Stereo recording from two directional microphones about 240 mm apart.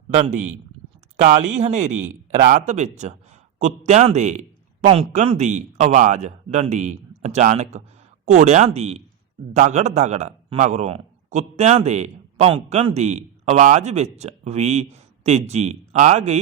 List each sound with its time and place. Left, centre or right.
0.2 s a man's voice: right